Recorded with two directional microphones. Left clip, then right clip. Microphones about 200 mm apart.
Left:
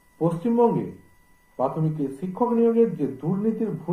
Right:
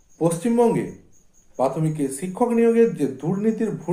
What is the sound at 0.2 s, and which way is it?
Speech, 35° right (ahead or behind).